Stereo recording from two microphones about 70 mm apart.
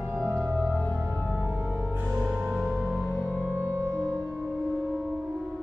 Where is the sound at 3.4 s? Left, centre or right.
Right.